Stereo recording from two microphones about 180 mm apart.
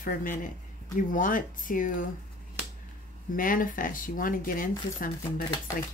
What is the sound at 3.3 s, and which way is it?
Speech, 50° left (ahead or behind).